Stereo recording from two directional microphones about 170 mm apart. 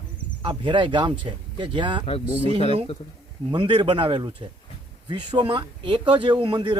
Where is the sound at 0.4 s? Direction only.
30° right (ahead or behind).